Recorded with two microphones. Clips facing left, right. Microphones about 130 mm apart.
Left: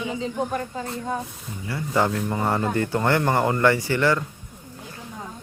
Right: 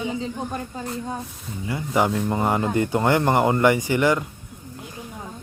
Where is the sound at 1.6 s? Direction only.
15° right (ahead or behind).